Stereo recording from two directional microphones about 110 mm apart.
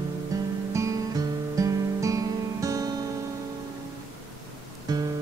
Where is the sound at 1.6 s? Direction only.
30° right (ahead or behind).